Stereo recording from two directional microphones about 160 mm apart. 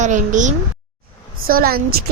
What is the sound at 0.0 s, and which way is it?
Speech, 50° right (ahead or behind).